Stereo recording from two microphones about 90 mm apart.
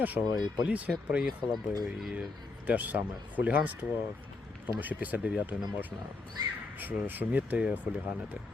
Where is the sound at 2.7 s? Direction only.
20° right (ahead or behind).